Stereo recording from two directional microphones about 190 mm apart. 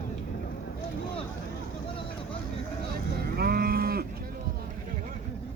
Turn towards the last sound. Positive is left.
turn(degrees=-55)  # may be behind; listen again after turning